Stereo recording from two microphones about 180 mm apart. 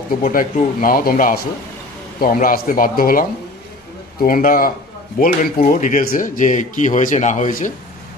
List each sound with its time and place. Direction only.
0.1 s speech: 50° left (ahead or behind)